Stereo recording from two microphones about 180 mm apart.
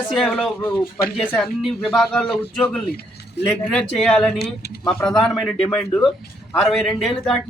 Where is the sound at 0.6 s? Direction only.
15° left (ahead or behind).